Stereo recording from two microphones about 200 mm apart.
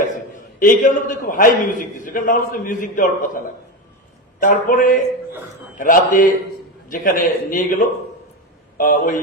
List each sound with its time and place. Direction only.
0.6 s a man's voice: 40° left (ahead or behind)
8.8 s a man's voice: 40° left (ahead or behind)